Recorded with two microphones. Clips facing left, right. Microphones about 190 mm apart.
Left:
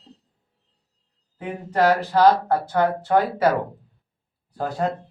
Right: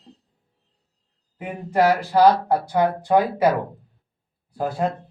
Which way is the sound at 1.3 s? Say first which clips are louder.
Right 2 dB; 10° right (ahead or behind).